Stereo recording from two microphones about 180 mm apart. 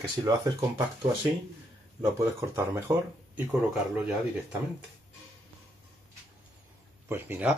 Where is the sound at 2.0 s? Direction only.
15° right (ahead or behind).